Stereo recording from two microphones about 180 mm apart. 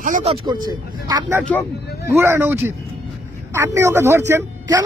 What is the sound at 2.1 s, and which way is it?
Speech, 15° right (ahead or behind).